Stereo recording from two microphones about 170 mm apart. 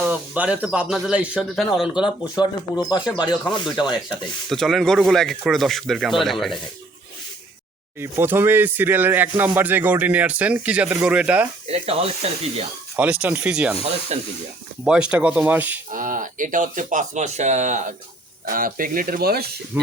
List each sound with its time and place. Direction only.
0.0 s speech: 10° right (ahead or behind)
2.3 s speech: 25° left (ahead or behind)
4.4 s speech: centre (ahead or behind)
7.9 s speech: 15° right (ahead or behind)
11.7 s speech: 35° right (ahead or behind)
13.0 s speech: 10° right (ahead or behind)
14.1 s speech: 40° right (ahead or behind)
14.8 s speech: 5° right (ahead or behind)
15.9 s speech: 50° right (ahead or behind)
18.4 s speech: 55° right (ahead or behind)
19.7 s speech: 10° right (ahead or behind)